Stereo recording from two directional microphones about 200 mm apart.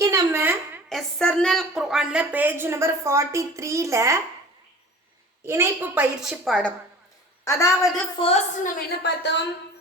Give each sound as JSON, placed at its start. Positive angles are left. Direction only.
{"t": 0.0, "sound": "a sound", "side_deg": -15}
{"t": 0.9, "sound": "a woman's voice", "side_deg": 0}
{"t": 5.5, "sound": "a woman's voice", "side_deg": -10}
{"t": 7.4, "sound": "a woman's voice", "side_deg": 15}
{"t": 8.2, "sound": "a woman's voice", "side_deg": 30}
{"t": 9.0, "sound": "speech", "side_deg": 60}